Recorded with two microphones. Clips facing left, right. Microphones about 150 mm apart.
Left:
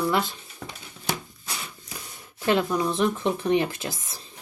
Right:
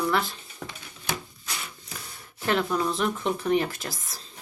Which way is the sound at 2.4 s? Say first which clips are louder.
Left 2 dB; 15° left (ahead or behind).